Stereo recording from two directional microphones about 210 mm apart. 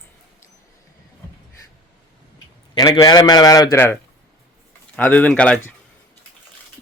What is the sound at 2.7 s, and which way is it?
A man's voice, 20° left (ahead or behind).